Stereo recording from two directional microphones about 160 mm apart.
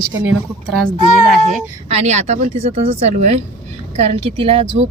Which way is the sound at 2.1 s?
45° right (ahead or behind).